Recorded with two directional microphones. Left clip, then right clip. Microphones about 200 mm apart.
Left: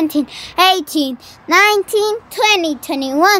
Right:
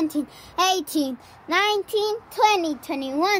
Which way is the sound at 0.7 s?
10° left (ahead or behind).